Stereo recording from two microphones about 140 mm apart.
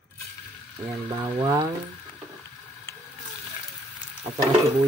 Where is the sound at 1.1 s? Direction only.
35° right (ahead or behind).